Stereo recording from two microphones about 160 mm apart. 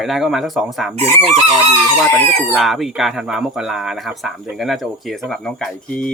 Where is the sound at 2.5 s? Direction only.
Centre (ahead or behind).